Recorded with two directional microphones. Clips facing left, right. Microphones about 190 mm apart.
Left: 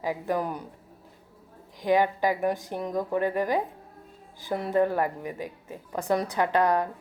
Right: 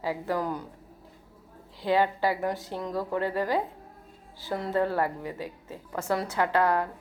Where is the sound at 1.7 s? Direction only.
15° left (ahead or behind).